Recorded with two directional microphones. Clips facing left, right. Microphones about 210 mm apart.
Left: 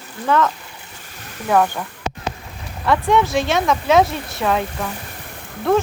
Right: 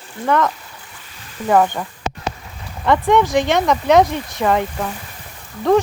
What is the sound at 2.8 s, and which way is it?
Speech, 20° right (ahead or behind).